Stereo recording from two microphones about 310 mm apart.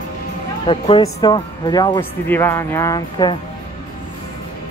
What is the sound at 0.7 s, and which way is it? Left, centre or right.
Speech, centre.